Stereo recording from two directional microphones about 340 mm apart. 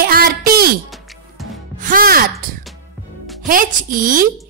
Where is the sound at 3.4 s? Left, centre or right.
Right.